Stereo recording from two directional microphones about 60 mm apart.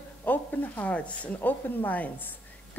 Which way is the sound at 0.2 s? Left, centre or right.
Left.